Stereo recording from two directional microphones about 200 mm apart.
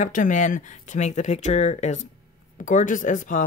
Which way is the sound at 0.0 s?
40° left (ahead or behind).